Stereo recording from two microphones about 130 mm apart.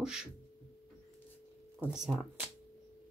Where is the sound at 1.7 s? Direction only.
5° right (ahead or behind).